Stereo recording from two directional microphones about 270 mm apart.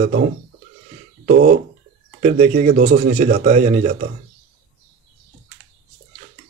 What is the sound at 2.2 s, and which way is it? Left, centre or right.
Speech, right.